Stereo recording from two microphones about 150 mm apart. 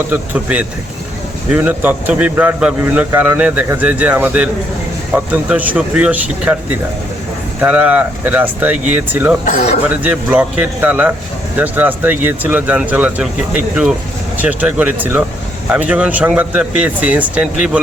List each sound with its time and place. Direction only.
0.1 s a man's voice: 10° right (ahead or behind)
7.6 s a man's voice: 10° right (ahead or behind)
9.4 s speech: 50° left (ahead or behind)
10.0 s a man's voice: 10° right (ahead or behind)